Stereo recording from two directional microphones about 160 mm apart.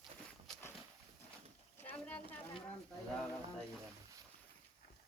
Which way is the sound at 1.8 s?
10° left (ahead or behind).